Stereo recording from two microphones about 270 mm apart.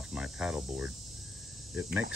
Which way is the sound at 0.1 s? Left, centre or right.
Centre.